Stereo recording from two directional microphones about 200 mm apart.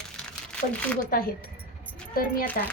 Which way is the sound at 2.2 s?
45° left (ahead or behind).